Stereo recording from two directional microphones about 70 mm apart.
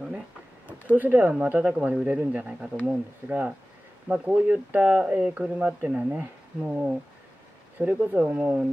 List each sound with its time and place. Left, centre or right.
0.9 s speech: right